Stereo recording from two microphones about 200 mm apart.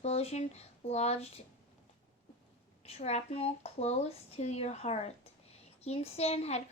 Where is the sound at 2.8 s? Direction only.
30° left (ahead or behind).